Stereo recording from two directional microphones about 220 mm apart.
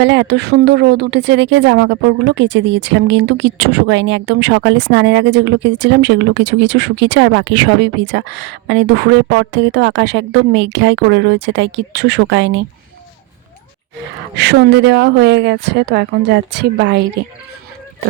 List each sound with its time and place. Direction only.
0.0 s speech: 50° right (ahead or behind)
14.3 s speech: 50° right (ahead or behind)